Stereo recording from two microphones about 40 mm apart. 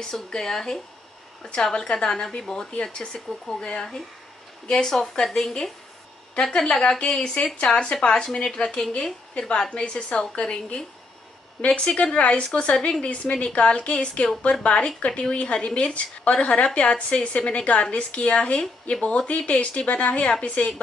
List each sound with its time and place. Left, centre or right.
0.0 s speech: centre
4.8 s speech: centre; by 8.5 s left
8.6 s speech: centre
9.7 s a woman's voice: left